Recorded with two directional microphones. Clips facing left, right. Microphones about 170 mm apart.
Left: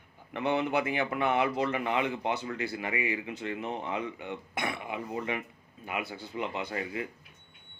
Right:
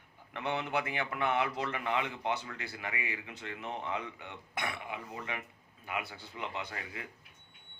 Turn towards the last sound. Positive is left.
turn(degrees=15)  # may be behind; listen again after turning